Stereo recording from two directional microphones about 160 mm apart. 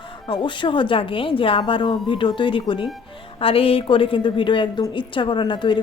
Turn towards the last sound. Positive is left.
turn(degrees=30)  # may be behind; listen again after turning